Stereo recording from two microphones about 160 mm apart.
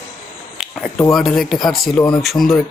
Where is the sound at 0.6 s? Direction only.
Centre (ahead or behind).